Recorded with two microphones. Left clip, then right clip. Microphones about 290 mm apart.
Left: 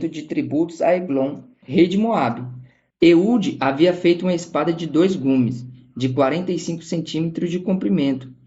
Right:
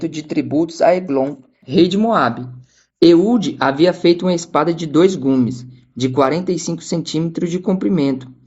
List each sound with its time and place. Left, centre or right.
0.0 s speech: right